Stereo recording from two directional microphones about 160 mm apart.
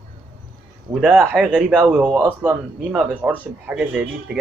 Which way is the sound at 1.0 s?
5° right (ahead or behind).